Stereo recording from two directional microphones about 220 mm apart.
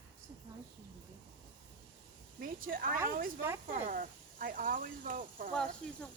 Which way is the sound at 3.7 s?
40° right (ahead or behind).